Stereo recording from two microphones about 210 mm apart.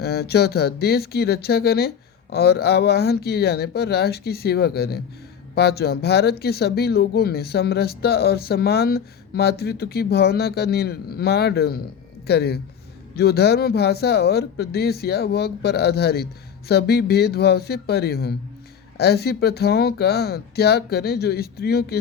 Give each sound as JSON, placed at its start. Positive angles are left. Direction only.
{"t": 0.0, "sound": "speech", "side_deg": 50}